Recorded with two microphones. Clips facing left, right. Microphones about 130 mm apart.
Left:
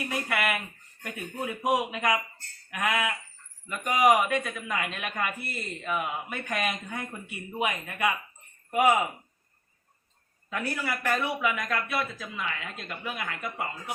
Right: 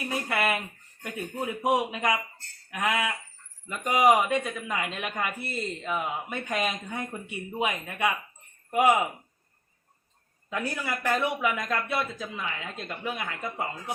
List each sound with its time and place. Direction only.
0.1 s speech: 30° right (ahead or behind)
2.6 s a sound: 20° right (ahead or behind)
3.7 s speech: 25° right (ahead or behind)
10.5 s speech: 20° right (ahead or behind)